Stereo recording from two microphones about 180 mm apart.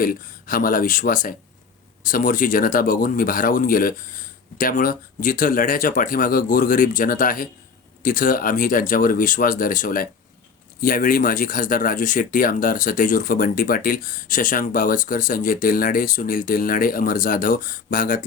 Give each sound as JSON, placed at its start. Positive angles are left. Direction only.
{"t": 0.0, "sound": "speech", "side_deg": 50}